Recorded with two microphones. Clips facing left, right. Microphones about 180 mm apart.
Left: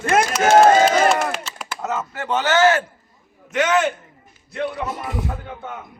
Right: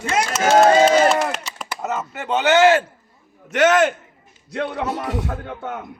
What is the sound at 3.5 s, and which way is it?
A man's voice, 75° right (ahead or behind).